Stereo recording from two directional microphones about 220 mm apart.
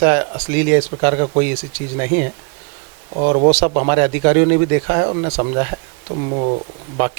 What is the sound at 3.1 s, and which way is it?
Speech, 30° right (ahead or behind).